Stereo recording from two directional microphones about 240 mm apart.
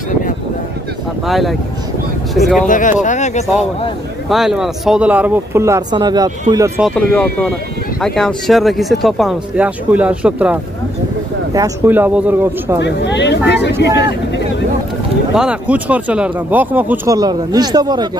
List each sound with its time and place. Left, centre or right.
1.2 s speech: centre
2.6 s speech: left
4.3 s speech: centre
6.8 s speech: centre
12.8 s speech: left
15.3 s speech: centre